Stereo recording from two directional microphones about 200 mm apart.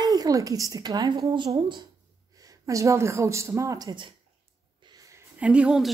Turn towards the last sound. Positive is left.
turn(degrees=-5)  # may be behind; listen again after turning